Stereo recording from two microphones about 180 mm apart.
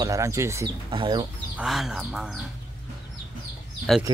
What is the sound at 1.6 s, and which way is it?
Speech, centre (ahead or behind).